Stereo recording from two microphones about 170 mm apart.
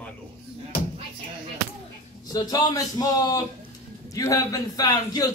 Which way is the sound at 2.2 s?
20° left (ahead or behind).